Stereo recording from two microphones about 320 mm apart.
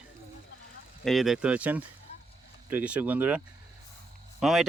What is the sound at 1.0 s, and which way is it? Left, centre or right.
Speech, centre.